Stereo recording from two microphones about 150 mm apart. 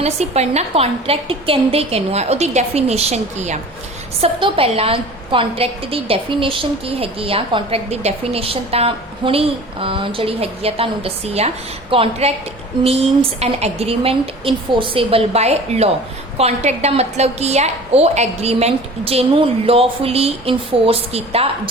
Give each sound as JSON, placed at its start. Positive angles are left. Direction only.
{"t": 0.0, "sound": "a woman's voice", "side_deg": -45}
{"t": 4.2, "sound": "a woman's voice", "side_deg": -35}